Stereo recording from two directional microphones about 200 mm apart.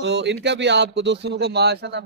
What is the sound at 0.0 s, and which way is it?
Speech, 60° right (ahead or behind).